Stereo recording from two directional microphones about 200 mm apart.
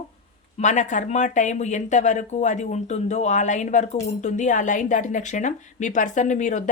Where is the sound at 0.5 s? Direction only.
35° left (ahead or behind).